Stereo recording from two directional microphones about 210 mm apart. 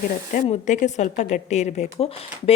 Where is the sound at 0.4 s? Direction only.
35° left (ahead or behind).